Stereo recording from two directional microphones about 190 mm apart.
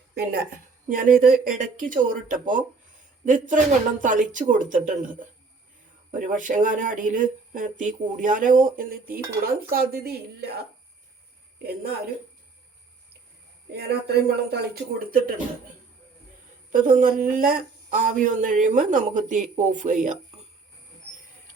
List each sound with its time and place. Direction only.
0.1 s a woman's voice: 60° right (ahead or behind)
0.9 s a woman's voice: 45° right (ahead or behind)
13.7 s speech: 60° right (ahead or behind)
16.7 s a woman's voice: 45° right (ahead or behind)